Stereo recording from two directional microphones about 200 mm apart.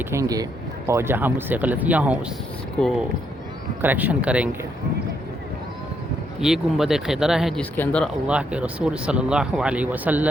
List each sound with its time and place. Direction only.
0.0 s speech: 15° right (ahead or behind)
3.8 s speech: 10° right (ahead or behind)
6.4 s speech: centre (ahead or behind)
8.3 s speech: 5° right (ahead or behind)